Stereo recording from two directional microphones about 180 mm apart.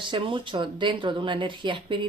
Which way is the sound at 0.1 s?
30° right (ahead or behind).